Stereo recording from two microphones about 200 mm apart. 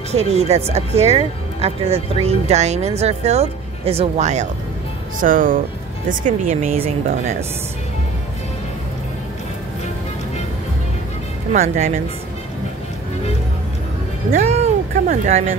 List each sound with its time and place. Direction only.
0.1 s speech: 30° right (ahead or behind)
11.5 s speech: 35° right (ahead or behind)
14.3 s music: 35° right (ahead or behind)